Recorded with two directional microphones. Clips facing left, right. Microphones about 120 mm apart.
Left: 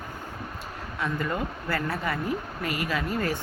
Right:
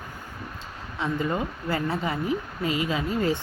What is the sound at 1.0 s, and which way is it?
Speech, 20° right (ahead or behind).